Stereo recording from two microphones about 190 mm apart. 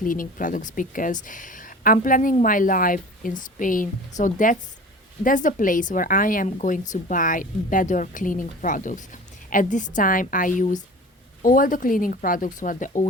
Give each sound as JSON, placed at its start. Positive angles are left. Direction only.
{"t": 0.0, "sound": "speech", "side_deg": 45}